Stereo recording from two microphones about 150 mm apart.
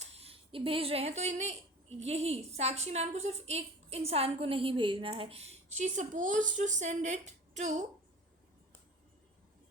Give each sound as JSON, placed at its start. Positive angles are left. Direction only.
{"t": 0.0, "sound": "a woman's voice", "side_deg": -40}